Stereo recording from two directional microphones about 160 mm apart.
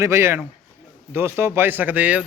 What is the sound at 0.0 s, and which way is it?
Speech, 15° right (ahead or behind).